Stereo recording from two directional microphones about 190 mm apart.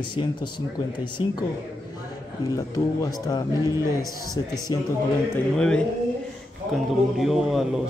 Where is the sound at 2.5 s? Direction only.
15° left (ahead or behind).